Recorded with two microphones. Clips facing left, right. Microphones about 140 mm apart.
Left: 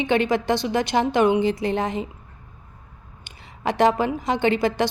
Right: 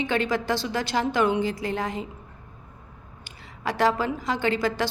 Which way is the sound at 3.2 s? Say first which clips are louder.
Left 5 dB; 20° left (ahead or behind).